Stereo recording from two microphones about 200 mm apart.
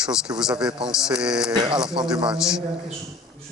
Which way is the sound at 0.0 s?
5° right (ahead or behind).